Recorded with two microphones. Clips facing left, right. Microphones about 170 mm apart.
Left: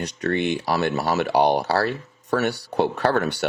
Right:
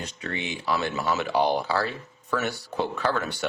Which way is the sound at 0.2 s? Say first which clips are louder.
Left 11 dB; 45° left (ahead or behind).